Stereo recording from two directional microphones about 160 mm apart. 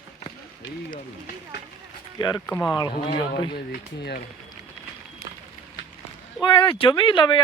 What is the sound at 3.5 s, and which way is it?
Speech, 85° left.